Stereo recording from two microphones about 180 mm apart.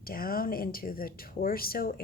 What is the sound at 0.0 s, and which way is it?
Speech, 55° left (ahead or behind).